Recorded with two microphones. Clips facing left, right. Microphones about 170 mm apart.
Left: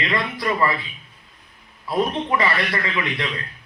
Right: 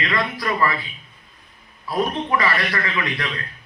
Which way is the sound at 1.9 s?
25° left (ahead or behind).